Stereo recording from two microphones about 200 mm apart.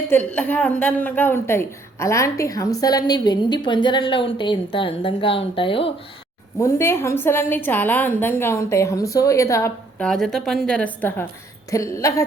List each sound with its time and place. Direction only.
0.3 s a woman's voice: 5° left (ahead or behind); by 5.9 s 25° left (ahead or behind)
6.6 s a woman's voice: 15° left (ahead or behind)
10.1 s a woman's voice: centre (ahead or behind)